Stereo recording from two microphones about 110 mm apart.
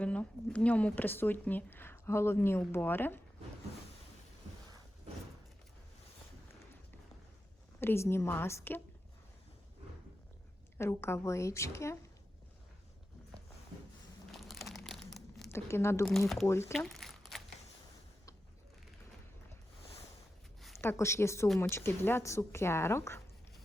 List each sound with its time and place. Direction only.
0.0 s speech: 10° left (ahead or behind)
7.8 s speech: 20° left (ahead or behind)
10.8 s speech: 25° left (ahead or behind)
14.3 s crumpling: centre (ahead or behind)
15.4 s speech: 25° left (ahead or behind)
16.7 s crumpling: centre (ahead or behind)
20.6 s a sound: centre (ahead or behind)
20.8 s speech: 25° left (ahead or behind)